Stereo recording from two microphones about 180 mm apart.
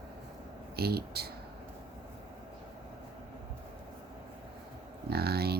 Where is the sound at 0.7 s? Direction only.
60° right (ahead or behind).